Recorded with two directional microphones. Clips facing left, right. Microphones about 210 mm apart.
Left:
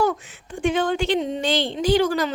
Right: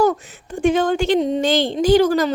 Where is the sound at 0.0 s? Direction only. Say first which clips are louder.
Right 5 dB; 40° right (ahead or behind).